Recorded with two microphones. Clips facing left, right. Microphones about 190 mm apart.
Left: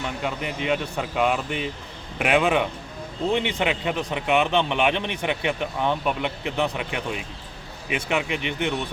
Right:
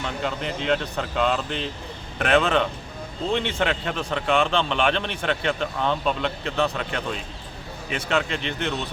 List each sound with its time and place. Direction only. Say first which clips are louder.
0.2 s speech: even; 10° left (ahead or behind)